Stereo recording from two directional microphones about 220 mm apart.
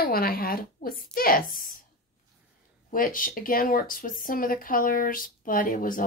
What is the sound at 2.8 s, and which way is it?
A woman's voice, 40° left (ahead or behind).